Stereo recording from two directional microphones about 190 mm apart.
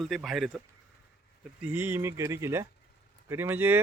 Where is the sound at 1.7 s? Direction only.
10° right (ahead or behind).